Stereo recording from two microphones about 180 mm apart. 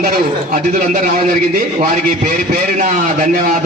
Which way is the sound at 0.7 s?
50° right (ahead or behind).